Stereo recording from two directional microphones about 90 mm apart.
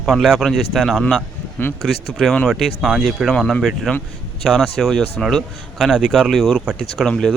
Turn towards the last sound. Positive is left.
turn(degrees=5)  # may be behind; listen again after turning